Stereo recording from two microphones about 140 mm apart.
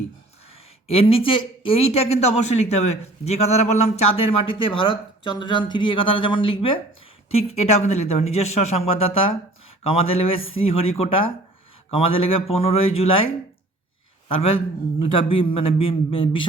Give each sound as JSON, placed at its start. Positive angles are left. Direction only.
{"t": 0.9, "sound": "speech", "side_deg": 40}
{"t": 4.4, "sound": "speech", "side_deg": 40}
{"t": 7.3, "sound": "speech", "side_deg": 50}
{"t": 14.3, "sound": "speech", "side_deg": 40}